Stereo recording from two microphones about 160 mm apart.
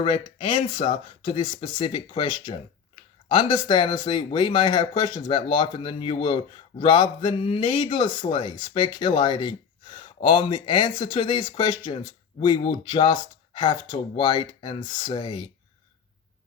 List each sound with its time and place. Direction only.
0.0 s speech: 30° left (ahead or behind)